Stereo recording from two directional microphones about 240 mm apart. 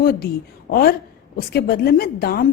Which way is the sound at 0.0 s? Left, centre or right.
Left.